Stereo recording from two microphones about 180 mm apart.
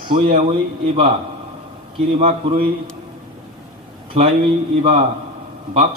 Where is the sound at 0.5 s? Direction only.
30° right (ahead or behind).